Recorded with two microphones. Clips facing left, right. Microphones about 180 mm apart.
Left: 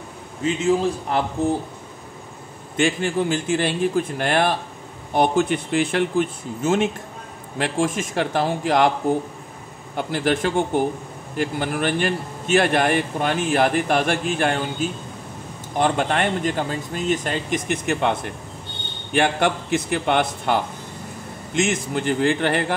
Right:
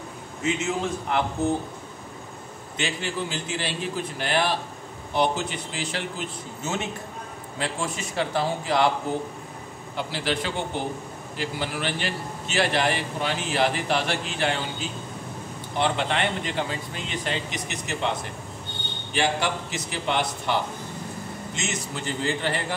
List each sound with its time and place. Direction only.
0.4 s a man's voice: 35° left (ahead or behind)
2.8 s a man's voice: 50° left (ahead or behind)
9.9 s a man's voice: 50° left (ahead or behind)
21.5 s a man's voice: 55° left (ahead or behind)